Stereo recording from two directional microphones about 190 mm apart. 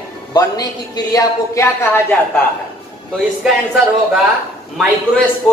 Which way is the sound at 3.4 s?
Centre (ahead or behind).